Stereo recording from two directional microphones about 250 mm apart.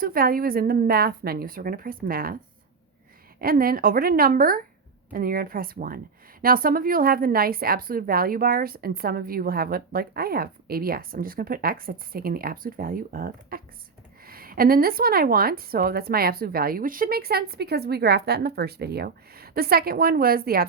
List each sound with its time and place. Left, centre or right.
0.0 s a woman's voice: right
3.4 s a woman's voice: right